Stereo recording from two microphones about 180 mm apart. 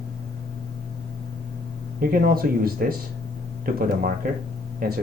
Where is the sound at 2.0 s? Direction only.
55° right (ahead or behind).